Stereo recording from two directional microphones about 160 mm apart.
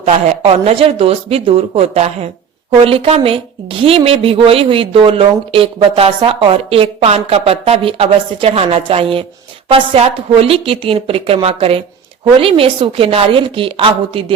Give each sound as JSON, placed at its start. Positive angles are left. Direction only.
{"t": 0.0, "sound": "a woman's voice", "side_deg": -45}